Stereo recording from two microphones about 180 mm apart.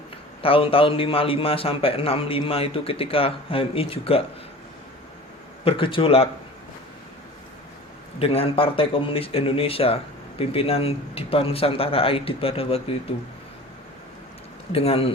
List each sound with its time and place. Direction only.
0.4 s a man's voice: 30° left (ahead or behind)
5.6 s a man's voice: 30° left (ahead or behind)
8.2 s a man's voice: 30° left (ahead or behind)
14.7 s a man's voice: 35° left (ahead or behind)